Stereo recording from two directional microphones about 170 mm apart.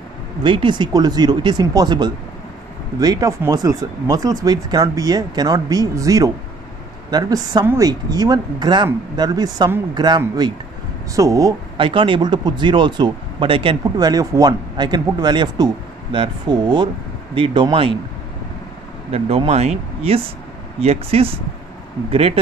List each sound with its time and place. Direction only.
0.4 s speech: 30° right (ahead or behind)
19.1 s speech: 35° right (ahead or behind)